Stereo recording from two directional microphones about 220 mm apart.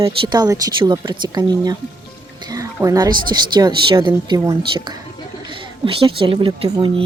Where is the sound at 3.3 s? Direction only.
20° right (ahead or behind).